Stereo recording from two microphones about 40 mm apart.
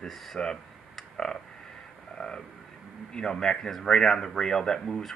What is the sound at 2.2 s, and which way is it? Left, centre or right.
Speech, centre.